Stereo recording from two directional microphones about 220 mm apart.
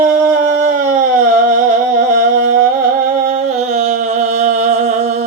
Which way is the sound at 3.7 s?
35° right (ahead or behind).